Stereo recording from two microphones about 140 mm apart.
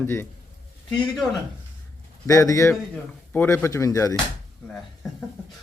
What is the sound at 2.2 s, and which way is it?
Speech, 20° left (ahead or behind).